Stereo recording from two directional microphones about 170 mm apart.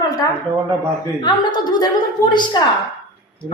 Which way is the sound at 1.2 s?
25° left (ahead or behind).